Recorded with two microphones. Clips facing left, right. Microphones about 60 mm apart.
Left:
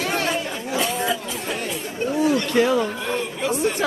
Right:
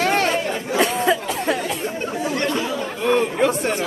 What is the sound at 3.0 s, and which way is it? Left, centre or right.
Speech, right.